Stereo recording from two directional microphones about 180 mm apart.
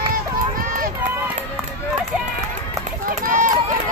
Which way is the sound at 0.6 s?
45° right (ahead or behind).